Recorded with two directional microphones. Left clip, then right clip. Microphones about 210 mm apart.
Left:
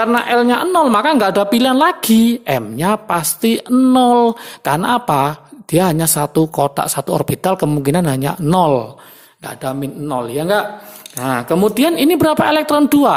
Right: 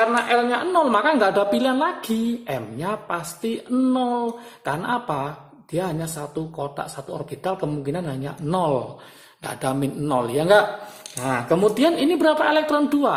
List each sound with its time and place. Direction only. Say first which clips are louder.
0.0 s a woman's voice: left 5 dB; 40° left (ahead or behind)
9.4 s speech: left 2 dB; 20° left (ahead or behind)
11.2 s a woman's voice: left 4 dB; 40° left (ahead or behind)